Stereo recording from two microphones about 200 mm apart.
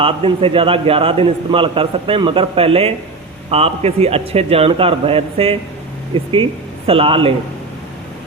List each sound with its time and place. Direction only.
0.0 s a man's voice: 25° right (ahead or behind)